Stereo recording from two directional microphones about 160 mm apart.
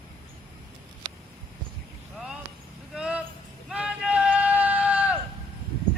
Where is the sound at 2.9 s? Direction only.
5° right (ahead or behind).